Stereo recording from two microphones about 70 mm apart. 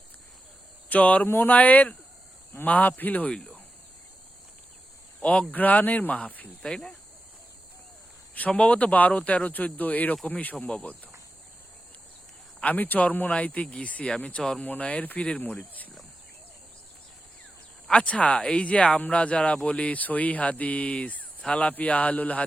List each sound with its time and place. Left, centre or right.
0.9 s speech: left
3.3 s cricket: centre
5.2 s speech: centre
6.6 s speech: centre
8.4 s speech: centre
12.6 s speech: left
17.8 s speech: centre